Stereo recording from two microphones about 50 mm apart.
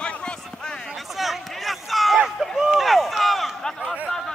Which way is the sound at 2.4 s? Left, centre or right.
Centre.